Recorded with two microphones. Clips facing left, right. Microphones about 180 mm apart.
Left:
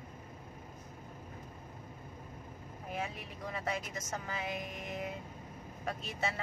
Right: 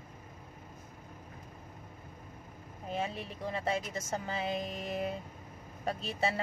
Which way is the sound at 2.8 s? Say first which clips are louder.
Right 4 dB; 25° right (ahead or behind).